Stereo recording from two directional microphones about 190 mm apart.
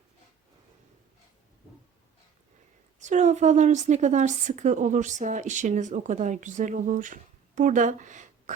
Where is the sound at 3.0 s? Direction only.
40° right (ahead or behind).